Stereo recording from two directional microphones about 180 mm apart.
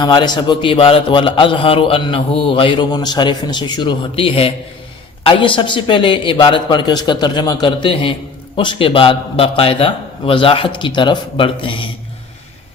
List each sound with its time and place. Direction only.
0.0 s a man's voice: 25° left (ahead or behind)